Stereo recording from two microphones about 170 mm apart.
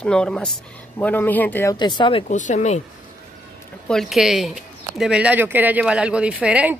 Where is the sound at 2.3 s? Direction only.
45° left (ahead or behind).